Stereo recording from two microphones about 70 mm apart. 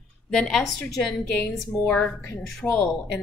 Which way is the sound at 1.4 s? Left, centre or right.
Left.